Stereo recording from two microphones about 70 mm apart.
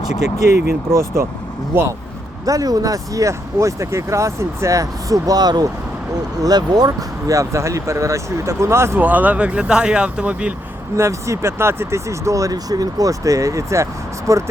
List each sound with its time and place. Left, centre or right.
0.9 s speech: right
2.5 s speech: right
9.0 s speech: right
10.9 s speech: right